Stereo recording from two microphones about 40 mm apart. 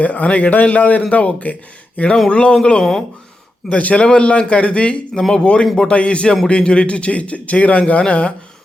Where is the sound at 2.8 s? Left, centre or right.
Centre.